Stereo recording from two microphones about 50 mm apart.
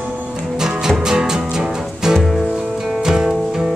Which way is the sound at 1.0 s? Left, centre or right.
Centre.